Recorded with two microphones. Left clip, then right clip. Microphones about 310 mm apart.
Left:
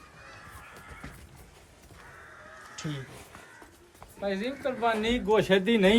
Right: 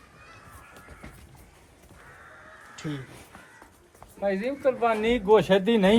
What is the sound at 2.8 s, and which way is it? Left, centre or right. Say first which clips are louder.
Speech: right 3 dB; centre.